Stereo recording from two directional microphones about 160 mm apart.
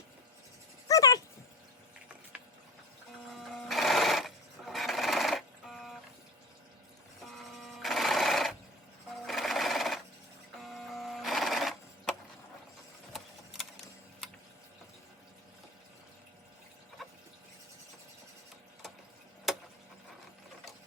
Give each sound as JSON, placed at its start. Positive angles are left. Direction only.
{"t": 0.9, "sound": "a sound", "side_deg": 20}
{"t": 3.3, "sound": "sewing machine", "side_deg": 0}
{"t": 7.3, "sound": "sewing machine", "side_deg": 0}
{"t": 17.0, "sound": "water", "side_deg": 0}